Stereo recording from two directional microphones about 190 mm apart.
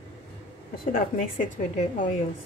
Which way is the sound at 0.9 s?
45° left (ahead or behind).